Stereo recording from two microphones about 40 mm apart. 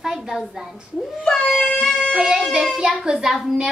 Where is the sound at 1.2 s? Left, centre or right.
Centre.